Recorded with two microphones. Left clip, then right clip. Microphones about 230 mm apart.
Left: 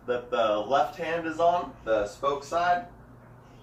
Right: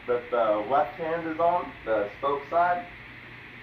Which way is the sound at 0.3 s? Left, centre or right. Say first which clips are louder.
Even; left.